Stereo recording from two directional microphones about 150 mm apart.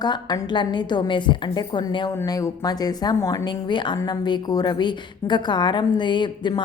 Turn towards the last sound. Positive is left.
turn(degrees=30)  # may be behind; listen again after turning